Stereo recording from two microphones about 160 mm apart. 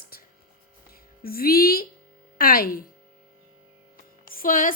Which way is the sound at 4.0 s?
60° left (ahead or behind).